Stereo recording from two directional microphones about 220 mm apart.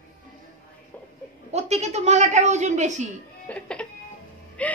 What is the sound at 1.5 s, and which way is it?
A woman's voice, 30° right (ahead or behind).